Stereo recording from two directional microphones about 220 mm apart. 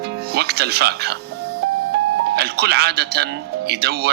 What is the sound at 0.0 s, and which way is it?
Speech, 45° right (ahead or behind).